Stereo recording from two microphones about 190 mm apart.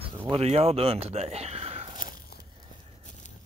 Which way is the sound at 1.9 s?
45° left (ahead or behind).